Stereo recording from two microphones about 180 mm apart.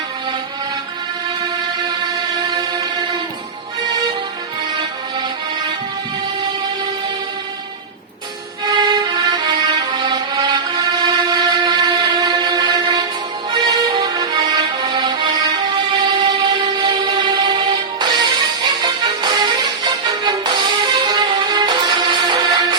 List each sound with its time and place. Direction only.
1.4 s music: 25° right (ahead or behind)
8.6 s music: 25° right (ahead or behind)